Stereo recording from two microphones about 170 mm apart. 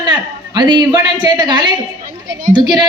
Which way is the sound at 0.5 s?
25° right (ahead or behind).